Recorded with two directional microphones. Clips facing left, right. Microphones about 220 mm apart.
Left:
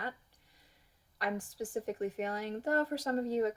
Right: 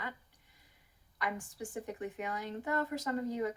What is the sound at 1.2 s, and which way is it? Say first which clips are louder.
Speech: left 3 dB; 35° left (ahead or behind).